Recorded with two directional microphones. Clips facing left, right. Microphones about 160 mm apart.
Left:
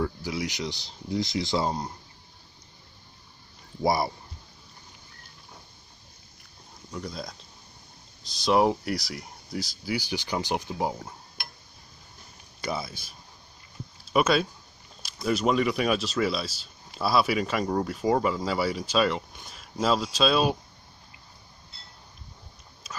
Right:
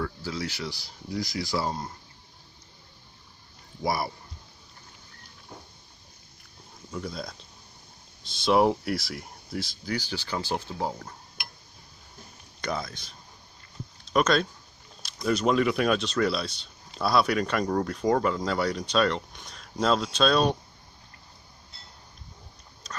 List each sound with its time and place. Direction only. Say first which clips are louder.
0.0 s speech: left 2 dB; 15° left (ahead or behind)
3.8 s speech: left 4 dB; 25° left (ahead or behind)
6.9 s speech: right 1 dB; centre (ahead or behind)
9.9 s speech: left 2 dB; 15° left (ahead or behind)
12.6 s speech: even; 10° left (ahead or behind)